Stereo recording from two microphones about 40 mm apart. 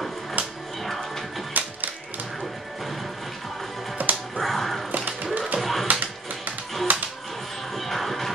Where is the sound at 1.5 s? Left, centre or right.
Right.